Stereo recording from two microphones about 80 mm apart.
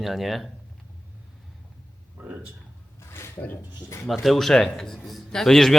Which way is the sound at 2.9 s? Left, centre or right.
Left.